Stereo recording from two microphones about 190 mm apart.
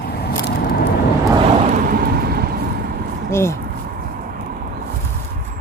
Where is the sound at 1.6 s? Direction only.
40° right (ahead or behind).